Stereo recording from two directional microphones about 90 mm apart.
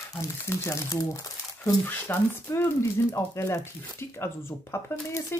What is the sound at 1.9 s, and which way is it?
Speech, 25° left (ahead or behind).